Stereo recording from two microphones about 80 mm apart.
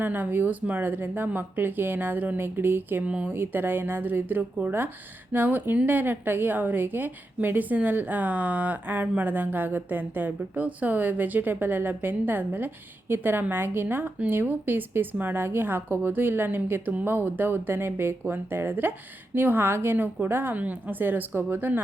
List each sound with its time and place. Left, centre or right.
0.0 s a woman's voice: right